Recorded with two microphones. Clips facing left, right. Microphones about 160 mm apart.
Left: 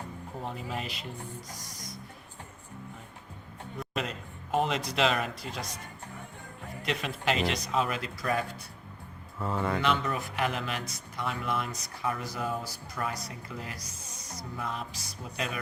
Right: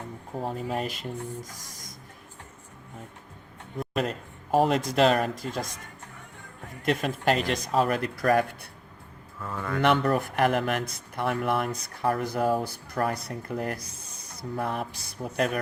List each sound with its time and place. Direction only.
0.4 s a man's voice: 45° right (ahead or behind)
3.8 s a man's voice: 45° right (ahead or behind)
6.8 s a man's voice: 45° right (ahead or behind)
9.4 s mantra: 25° left (ahead or behind)
9.8 s speech: 60° right (ahead or behind)